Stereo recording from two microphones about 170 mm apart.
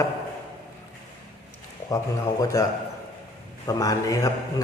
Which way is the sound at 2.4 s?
20° left (ahead or behind).